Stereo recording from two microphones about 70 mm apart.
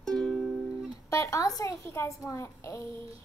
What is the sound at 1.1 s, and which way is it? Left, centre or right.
Speech, left.